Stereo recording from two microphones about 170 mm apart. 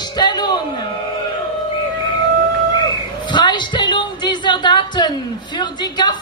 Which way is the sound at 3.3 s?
25° left (ahead or behind).